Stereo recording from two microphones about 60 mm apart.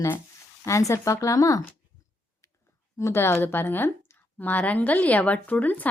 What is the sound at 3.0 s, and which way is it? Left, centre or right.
A woman's voice, left.